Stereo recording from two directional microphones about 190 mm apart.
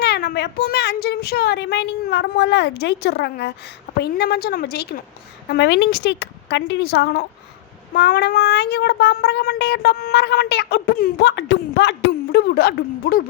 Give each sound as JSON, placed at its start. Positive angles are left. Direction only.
{"t": 0.0, "sound": "speech", "side_deg": 55}